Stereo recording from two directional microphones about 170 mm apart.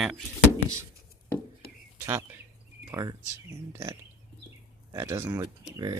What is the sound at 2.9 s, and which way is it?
Speech, 20° right (ahead or behind).